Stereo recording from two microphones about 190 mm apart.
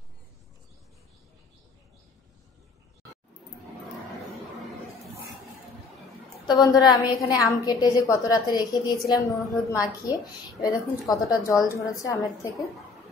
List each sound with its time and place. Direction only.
6.4 s a woman's voice: 20° left (ahead or behind)